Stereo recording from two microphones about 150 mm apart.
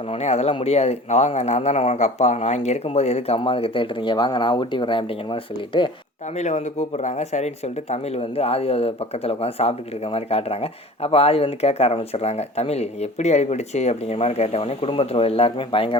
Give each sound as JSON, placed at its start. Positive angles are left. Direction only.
{"t": 0.1, "sound": "speech", "side_deg": 45}
{"t": 6.3, "sound": "speech", "side_deg": 50}